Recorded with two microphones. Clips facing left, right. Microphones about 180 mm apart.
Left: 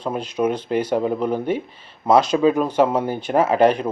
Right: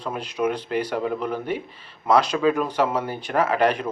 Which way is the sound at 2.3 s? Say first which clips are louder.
Left 5 dB; 25° left (ahead or behind).